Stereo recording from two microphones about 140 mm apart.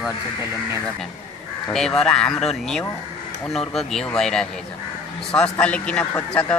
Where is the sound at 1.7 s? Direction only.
5° left (ahead or behind).